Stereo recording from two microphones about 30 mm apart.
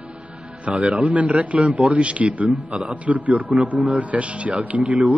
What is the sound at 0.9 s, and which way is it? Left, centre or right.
A man's voice, right.